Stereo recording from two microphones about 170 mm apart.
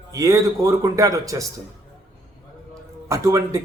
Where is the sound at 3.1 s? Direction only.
20° right (ahead or behind).